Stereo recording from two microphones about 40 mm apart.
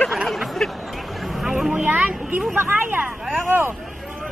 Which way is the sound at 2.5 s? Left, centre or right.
Right.